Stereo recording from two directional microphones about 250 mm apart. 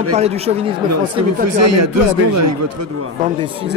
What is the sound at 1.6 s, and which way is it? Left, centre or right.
A man's voice, right.